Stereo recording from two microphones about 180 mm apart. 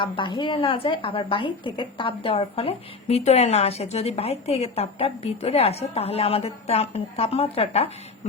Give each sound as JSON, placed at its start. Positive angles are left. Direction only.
{"t": 0.0, "sound": "a woman's voice", "side_deg": 25}